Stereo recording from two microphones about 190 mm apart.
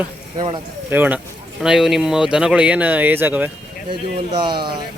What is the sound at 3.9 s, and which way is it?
Speech, 25° right (ahead or behind).